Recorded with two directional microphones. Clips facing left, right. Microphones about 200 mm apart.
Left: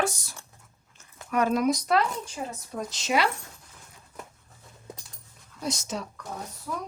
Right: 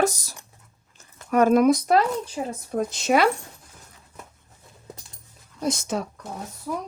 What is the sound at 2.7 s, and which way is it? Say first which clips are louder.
Speech: right 6 dB; 55° right (ahead or behind).